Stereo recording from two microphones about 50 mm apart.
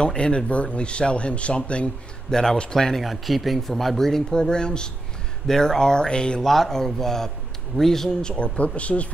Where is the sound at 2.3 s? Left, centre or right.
Centre.